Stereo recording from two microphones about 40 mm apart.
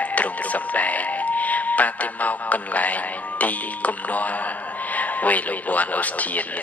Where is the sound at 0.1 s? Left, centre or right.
Left.